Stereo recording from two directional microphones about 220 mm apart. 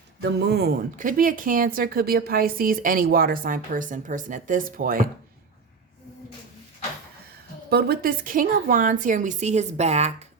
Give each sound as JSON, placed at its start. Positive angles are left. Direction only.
{"t": 0.2, "sound": "speech", "side_deg": -45}
{"t": 7.7, "sound": "speech", "side_deg": -45}